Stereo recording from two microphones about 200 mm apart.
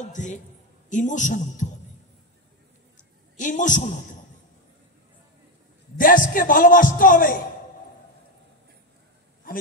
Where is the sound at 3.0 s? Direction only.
40° left (ahead or behind).